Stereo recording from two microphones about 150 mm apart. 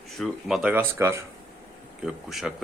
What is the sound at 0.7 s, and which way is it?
Speech, 15° right (ahead or behind).